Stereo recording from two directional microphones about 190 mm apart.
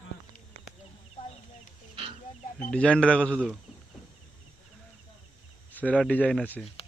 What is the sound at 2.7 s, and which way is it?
Speech, 5° left (ahead or behind).